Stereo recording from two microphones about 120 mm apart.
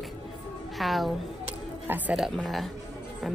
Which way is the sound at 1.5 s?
15° right (ahead or behind).